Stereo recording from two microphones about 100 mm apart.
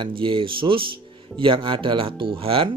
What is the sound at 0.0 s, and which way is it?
Speech, 60° right (ahead or behind).